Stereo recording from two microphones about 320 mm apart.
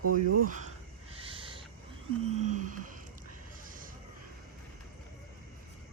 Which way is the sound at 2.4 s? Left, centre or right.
Right.